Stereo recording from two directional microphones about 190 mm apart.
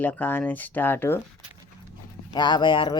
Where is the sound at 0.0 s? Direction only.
10° left (ahead or behind).